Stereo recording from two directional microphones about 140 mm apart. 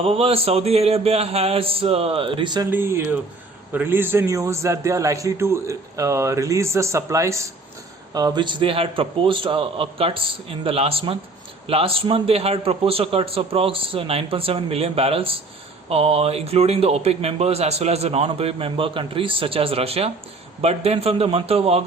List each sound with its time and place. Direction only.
0.0 s a man's voice: 45° right (ahead or behind)
2.6 s a man's voice: 15° right (ahead or behind); by 21.8 s 45° right (ahead or behind)